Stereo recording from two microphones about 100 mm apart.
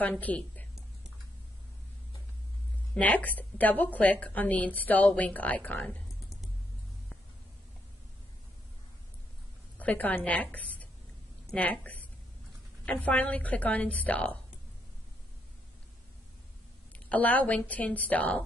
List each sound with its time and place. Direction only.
0.0 s a woman's voice: 15° left (ahead or behind)
2.9 s a woman's voice: 15° left (ahead or behind)
9.8 s a woman's voice: 15° left (ahead or behind)
16.9 s a woman's voice: 15° left (ahead or behind)